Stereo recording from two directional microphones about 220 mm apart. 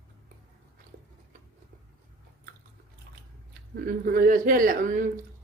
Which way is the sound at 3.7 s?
40° right (ahead or behind).